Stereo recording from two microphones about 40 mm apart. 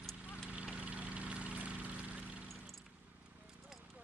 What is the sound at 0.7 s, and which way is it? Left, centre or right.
Vehicle, right.